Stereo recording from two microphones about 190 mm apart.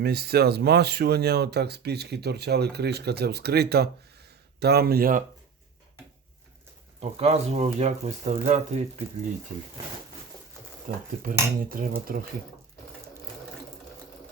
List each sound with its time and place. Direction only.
0.0 s speech: 55° right (ahead or behind)
7.0 s speech: 35° right (ahead or behind)
11.2 s cutlery: 50° right (ahead or behind)